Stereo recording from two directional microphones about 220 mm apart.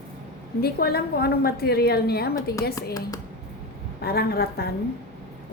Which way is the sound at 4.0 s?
45° left (ahead or behind).